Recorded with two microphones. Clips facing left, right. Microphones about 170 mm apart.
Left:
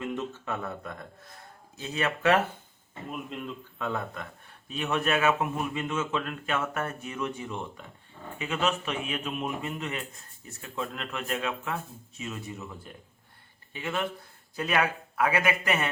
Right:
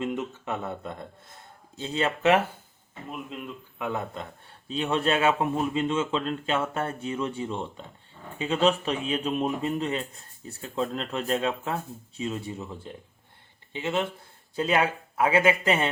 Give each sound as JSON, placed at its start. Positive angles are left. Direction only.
{"t": 0.0, "sound": "a man's voice", "side_deg": -20}
{"t": 3.3, "sound": "speech", "side_deg": 0}
{"t": 3.8, "sound": "a man's voice", "side_deg": -15}